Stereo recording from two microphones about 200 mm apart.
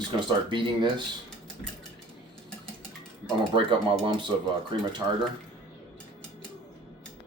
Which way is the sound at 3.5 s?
25° right (ahead or behind).